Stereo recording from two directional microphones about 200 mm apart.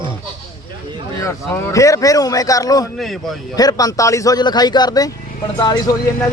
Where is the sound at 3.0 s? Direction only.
Centre (ahead or behind).